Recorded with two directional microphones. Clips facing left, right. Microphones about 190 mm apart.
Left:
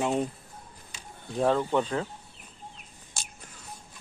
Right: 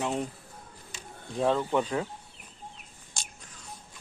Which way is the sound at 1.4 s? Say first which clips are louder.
Left 1 dB; centre (ahead or behind).